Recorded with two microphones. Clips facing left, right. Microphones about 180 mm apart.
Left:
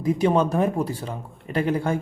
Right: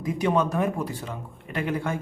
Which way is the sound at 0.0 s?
30° left (ahead or behind).